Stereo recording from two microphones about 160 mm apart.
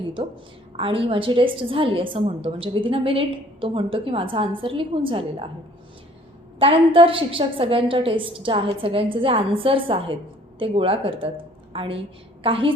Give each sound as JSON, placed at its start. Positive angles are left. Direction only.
{"t": 0.8, "sound": "a woman's voice", "side_deg": -35}
{"t": 6.6, "sound": "a woman's voice", "side_deg": -35}